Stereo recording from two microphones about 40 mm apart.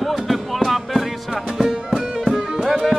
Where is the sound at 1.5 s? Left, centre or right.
Centre.